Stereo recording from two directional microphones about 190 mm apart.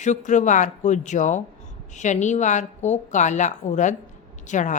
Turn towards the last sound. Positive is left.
turn(degrees=40)  # may be behind; listen again after turning